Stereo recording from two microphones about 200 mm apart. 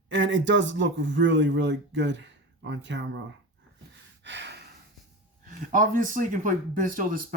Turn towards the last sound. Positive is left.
turn(degrees=-45)  # may be behind; listen again after turning